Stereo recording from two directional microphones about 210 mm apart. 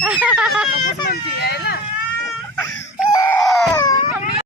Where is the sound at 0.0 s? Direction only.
5° right (ahead or behind).